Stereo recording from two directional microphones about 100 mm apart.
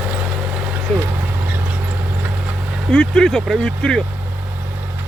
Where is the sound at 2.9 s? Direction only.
5° left (ahead or behind).